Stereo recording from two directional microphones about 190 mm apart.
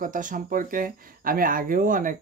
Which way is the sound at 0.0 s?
45° right (ahead or behind).